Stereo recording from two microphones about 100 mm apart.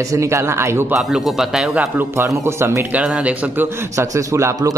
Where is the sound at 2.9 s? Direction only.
10° right (ahead or behind).